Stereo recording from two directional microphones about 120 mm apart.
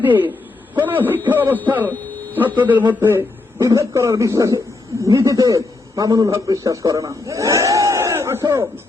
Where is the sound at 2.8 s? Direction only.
20° right (ahead or behind).